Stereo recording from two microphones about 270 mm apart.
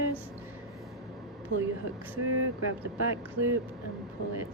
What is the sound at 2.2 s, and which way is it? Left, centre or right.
Speech, right.